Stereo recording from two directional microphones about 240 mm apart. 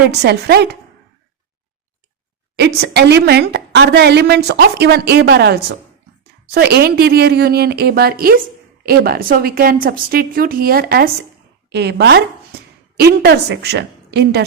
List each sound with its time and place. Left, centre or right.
0.2 s a woman's voice: right
2.6 s a woman's voice: right